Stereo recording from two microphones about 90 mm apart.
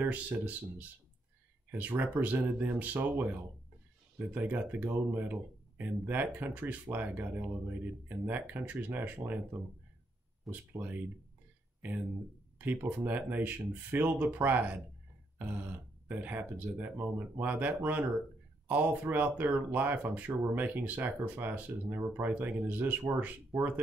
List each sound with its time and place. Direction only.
0.0 s speech: 20° right (ahead or behind)
10.5 s speech: 20° right (ahead or behind)
12.5 s speech: 20° right (ahead or behind)
16.1 s speech: 20° right (ahead or behind)
23.5 s speech: 5° right (ahead or behind)